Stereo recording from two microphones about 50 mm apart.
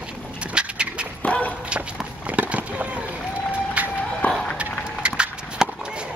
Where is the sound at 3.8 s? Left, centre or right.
Right.